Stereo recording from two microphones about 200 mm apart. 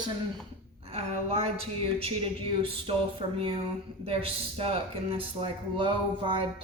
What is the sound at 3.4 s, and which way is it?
A woman's voice, 30° right (ahead or behind).